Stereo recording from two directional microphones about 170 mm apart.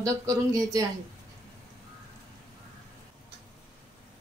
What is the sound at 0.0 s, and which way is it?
Speech, 20° right (ahead or behind).